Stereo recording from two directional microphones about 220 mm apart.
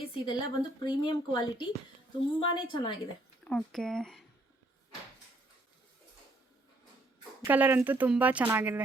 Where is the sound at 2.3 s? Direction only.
20° left (ahead or behind).